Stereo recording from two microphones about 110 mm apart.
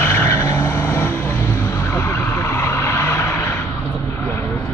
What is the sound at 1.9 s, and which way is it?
Vehicle, 25° left (ahead or behind).